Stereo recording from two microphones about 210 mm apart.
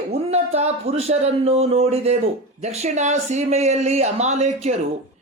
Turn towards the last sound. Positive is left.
turn(degrees=-30)  # may be behind; listen again after turning